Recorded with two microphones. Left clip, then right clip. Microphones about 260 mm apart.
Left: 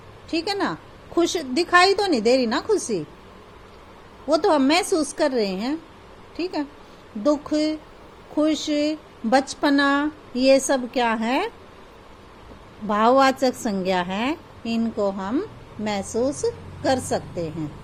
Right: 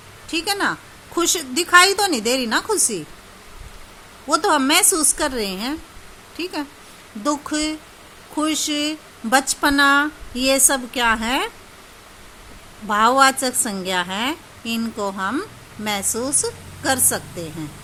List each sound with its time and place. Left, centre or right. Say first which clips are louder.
0.3 s speech: right 3 dB; centre
4.3 s speech: right 1 dB; centre
12.9 s speech: right 2 dB; centre